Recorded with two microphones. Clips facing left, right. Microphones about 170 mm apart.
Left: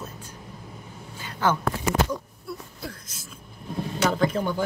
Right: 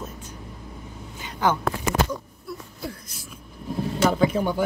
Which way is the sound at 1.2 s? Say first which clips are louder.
Right 1 dB; 15° right (ahead or behind).